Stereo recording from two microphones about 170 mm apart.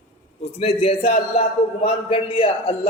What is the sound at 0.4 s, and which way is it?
A man's voice, 35° left (ahead or behind).